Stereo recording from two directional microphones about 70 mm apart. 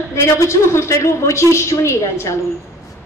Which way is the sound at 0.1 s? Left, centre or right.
Left.